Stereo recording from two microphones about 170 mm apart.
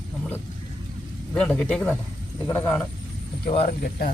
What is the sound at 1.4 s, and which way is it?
Speech, 5° left (ahead or behind).